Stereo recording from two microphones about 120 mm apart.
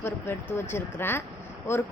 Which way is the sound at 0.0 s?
20° left (ahead or behind).